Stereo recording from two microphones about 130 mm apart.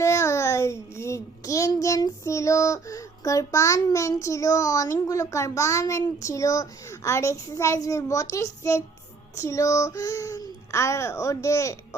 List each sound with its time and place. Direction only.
0.0 s a child's voice: 20° left (ahead or behind)